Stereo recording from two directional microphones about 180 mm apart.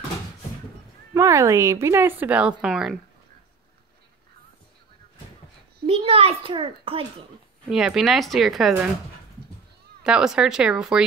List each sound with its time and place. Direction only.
1.1 s a woman's voice: 15° right (ahead or behind)
5.9 s a child's voice: 30° right (ahead or behind)
7.7 s speech: 5° right (ahead or behind)
10.0 s speech: 5° right (ahead or behind)